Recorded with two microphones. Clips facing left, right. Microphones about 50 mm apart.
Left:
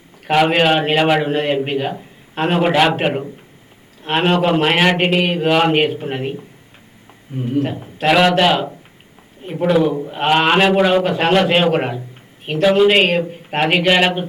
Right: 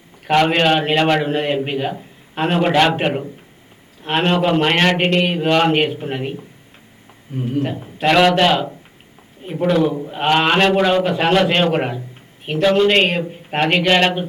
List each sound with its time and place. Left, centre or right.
0.3 s a man's voice: centre